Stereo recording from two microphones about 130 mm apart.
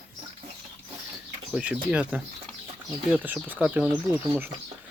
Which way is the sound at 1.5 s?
10° right (ahead or behind).